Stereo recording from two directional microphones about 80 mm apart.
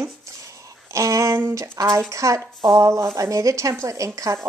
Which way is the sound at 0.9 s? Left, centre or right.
Right.